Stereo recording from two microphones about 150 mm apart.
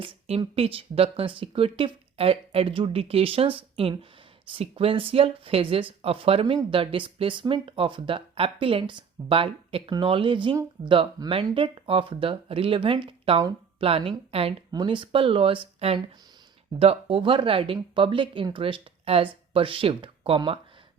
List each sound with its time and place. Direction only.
0.0 s speech: 40° right (ahead or behind)